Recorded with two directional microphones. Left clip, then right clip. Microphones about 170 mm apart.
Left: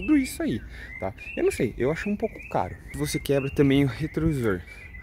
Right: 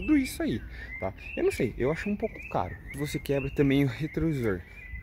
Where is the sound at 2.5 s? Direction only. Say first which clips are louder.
Left 4 dB; 30° left (ahead or behind).